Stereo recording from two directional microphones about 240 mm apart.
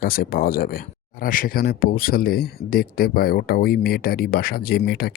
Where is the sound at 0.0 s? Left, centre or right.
Left.